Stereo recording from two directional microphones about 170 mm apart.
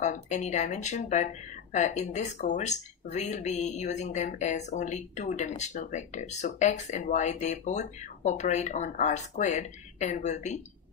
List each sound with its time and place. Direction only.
0.0 s speech: 45° left (ahead or behind)